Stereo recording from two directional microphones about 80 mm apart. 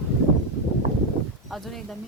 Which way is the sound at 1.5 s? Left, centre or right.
Centre.